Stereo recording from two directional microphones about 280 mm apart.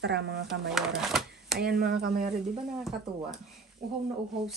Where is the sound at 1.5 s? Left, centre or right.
Right.